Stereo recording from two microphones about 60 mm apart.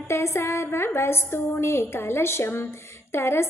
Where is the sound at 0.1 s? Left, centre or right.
Left.